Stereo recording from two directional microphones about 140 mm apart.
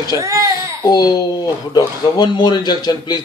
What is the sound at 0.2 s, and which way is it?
Speech, 25° right (ahead or behind).